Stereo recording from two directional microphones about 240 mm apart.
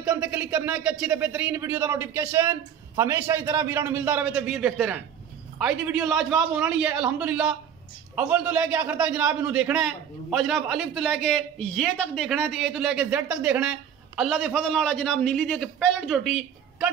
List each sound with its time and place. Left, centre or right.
0.0 s a man's voice: centre